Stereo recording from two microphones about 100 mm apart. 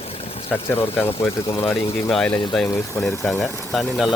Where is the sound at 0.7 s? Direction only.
20° left (ahead or behind).